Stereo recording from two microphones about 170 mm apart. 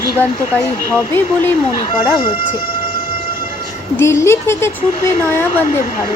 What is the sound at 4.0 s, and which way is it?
Speech, 15° left (ahead or behind).